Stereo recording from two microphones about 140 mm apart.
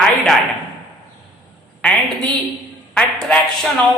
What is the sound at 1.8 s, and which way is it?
A woman's voice, 5° left (ahead or behind).